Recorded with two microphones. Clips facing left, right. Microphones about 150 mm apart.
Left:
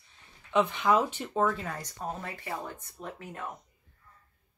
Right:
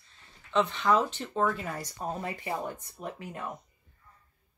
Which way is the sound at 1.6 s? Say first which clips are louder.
Right 1 dB; 10° right (ahead or behind).